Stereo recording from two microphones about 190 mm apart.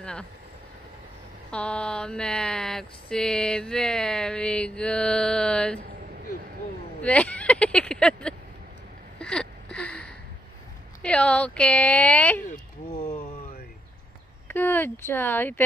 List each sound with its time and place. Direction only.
0.0 s speech: 5° left (ahead or behind)
1.5 s a sound: 5° left (ahead or behind)
7.0 s speech: 5° left (ahead or behind)
9.2 s gasp: 5° left (ahead or behind)
11.0 s speech: 5° left (ahead or behind)
13.0 s a sound: 30° left (ahead or behind)
14.5 s speech: 10° left (ahead or behind)